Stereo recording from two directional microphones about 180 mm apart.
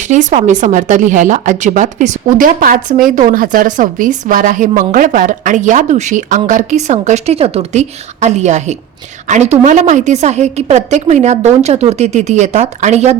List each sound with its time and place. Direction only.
0.1 s a woman's voice: 45° right (ahead or behind)